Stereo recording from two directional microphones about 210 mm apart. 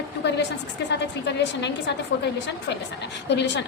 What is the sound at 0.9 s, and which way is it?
A woman's voice, 55° left (ahead or behind).